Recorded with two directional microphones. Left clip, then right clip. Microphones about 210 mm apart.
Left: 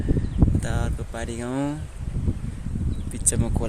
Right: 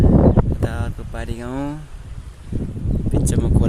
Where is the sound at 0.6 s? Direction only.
Centre (ahead or behind).